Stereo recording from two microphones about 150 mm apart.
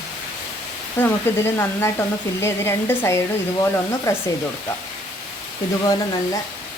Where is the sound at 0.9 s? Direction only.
15° left (ahead or behind).